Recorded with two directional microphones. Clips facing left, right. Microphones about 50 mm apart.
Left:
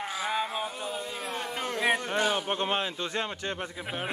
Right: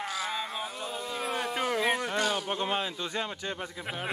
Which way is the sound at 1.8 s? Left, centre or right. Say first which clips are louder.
Left 5 dB; centre.